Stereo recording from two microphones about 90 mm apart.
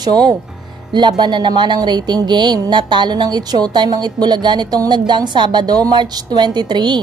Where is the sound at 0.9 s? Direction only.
55° right (ahead or behind).